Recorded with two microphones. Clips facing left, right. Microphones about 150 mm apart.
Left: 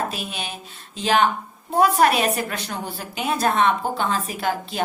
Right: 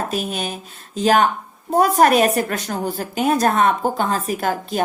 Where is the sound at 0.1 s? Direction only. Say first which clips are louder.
Right 7 dB; 45° right (ahead or behind).